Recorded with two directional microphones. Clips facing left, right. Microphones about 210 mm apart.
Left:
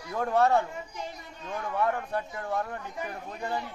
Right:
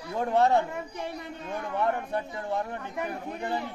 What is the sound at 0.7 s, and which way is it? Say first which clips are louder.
Speech: right 4 dB; 60° right (ahead or behind).